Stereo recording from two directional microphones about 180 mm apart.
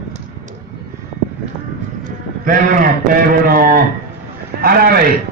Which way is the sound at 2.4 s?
50° right (ahead or behind).